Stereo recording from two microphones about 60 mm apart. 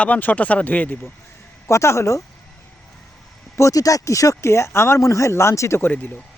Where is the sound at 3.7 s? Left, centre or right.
Left.